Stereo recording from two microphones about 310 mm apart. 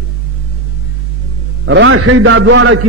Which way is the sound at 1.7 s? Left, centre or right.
Right.